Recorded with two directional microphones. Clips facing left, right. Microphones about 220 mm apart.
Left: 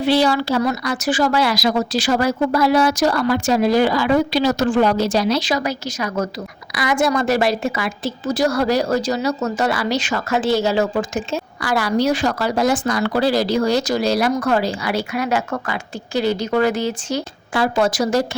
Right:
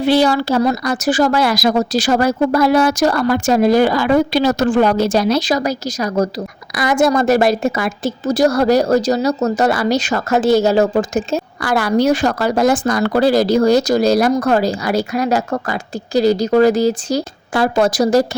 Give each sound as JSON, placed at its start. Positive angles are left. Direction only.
{"t": 0.0, "sound": "a woman's voice", "side_deg": -45}